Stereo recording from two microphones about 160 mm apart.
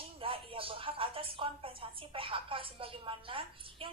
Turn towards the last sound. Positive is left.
turn(degrees=-35)  # may be behind; listen again after turning